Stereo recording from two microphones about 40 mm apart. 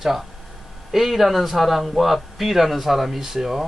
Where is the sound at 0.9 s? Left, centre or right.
Centre.